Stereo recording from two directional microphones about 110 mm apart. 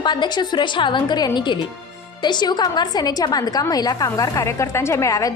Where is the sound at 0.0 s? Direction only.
40° left (ahead or behind).